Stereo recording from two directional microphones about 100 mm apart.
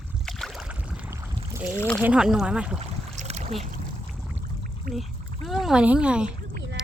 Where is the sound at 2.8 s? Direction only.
90° right.